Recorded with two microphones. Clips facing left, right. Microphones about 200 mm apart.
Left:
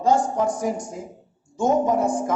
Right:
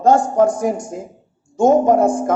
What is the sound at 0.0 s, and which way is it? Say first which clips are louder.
A man's voice: right 7 dB; 50° right (ahead or behind).